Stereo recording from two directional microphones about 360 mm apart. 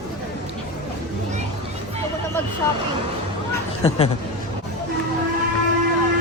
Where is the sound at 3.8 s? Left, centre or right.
Centre.